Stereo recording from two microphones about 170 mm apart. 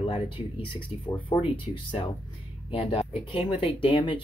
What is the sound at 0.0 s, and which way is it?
Speech, 30° left (ahead or behind).